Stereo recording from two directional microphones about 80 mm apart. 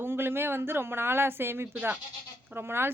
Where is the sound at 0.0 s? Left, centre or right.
Right.